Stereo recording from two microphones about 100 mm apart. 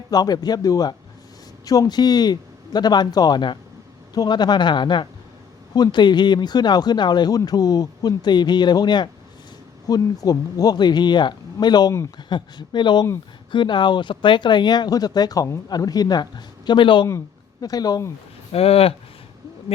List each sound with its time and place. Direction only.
0.1 s speech: 40° left (ahead or behind)
17.6 s speech: 40° left (ahead or behind)
18.5 s speech: 80° left